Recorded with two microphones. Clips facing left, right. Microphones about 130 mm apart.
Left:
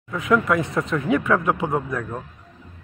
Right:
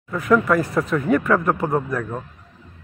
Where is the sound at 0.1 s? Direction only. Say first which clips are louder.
Right 2 dB; centre (ahead or behind).